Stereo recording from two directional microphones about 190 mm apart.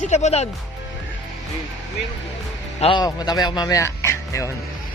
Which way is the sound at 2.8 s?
25° left (ahead or behind).